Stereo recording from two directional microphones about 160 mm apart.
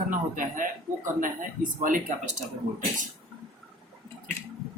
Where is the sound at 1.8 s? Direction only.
55° right (ahead or behind).